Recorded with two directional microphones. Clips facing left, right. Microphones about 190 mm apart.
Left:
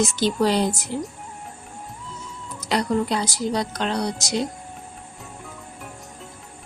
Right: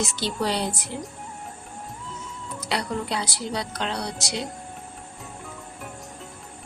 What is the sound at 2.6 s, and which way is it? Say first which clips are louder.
A woman's voice: left 6 dB; 45° left (ahead or behind).